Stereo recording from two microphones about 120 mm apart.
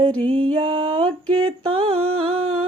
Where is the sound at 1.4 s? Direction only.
50° right (ahead or behind).